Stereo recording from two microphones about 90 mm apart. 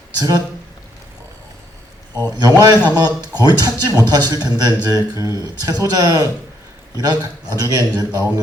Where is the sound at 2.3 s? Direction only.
45° right (ahead or behind).